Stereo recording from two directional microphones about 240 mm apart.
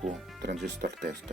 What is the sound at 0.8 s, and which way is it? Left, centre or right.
Speech, right.